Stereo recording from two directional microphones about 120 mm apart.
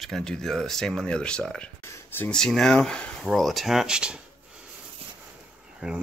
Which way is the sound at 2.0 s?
15° left (ahead or behind).